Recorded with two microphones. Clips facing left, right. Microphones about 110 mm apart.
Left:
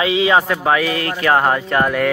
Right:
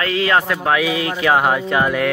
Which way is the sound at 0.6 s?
5° right (ahead or behind).